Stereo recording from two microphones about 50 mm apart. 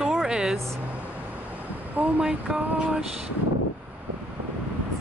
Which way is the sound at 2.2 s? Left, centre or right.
Centre.